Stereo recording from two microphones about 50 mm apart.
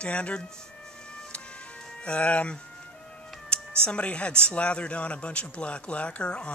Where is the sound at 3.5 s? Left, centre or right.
Left.